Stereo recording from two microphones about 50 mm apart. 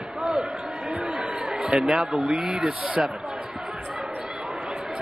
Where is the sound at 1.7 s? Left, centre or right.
Centre.